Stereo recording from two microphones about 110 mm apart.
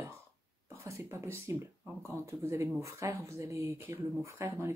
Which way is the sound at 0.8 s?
25° right (ahead or behind).